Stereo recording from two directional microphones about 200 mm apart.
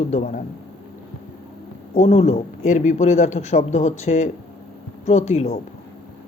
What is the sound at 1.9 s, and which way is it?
Speech, 35° left (ahead or behind).